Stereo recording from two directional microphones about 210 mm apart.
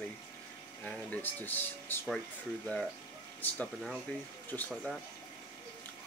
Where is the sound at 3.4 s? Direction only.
10° left (ahead or behind).